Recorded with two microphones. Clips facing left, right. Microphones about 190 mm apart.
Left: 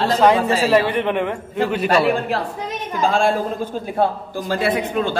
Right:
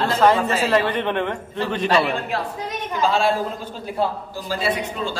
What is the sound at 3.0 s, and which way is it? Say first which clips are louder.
A man's voice: left 2 dB; 50° left (ahead or behind).